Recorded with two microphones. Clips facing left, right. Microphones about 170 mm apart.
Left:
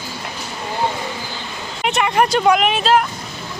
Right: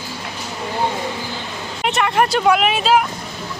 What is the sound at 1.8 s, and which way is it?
Speech, centre (ahead or behind).